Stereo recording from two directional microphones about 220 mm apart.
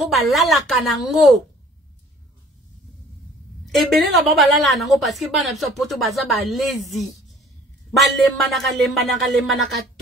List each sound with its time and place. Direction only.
0.1 s a woman's voice: centre (ahead or behind)
3.6 s a woman's voice: centre (ahead or behind)